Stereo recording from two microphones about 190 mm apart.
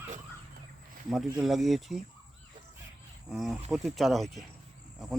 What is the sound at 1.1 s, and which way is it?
Speech, centre (ahead or behind).